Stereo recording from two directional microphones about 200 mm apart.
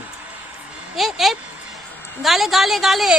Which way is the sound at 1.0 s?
Centre (ahead or behind).